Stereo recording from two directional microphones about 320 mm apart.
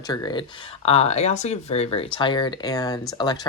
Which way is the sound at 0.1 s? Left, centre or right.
Centre.